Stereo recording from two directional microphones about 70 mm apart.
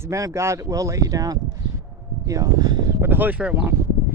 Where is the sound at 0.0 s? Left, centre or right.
Right.